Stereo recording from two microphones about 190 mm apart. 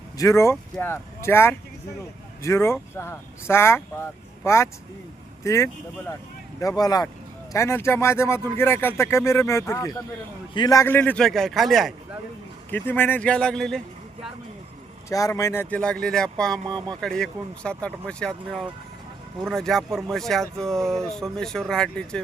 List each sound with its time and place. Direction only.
0.2 s speech: 15° left (ahead or behind); by 14.3 s centre (ahead or behind)
15.1 s speech: 15° left (ahead or behind)
16.6 s speech: 20° right (ahead or behind)
17.0 s speech: 5° left (ahead or behind)